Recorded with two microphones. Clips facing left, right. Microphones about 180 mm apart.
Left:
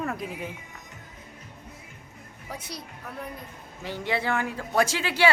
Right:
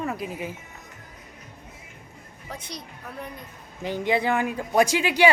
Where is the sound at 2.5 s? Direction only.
5° left (ahead or behind).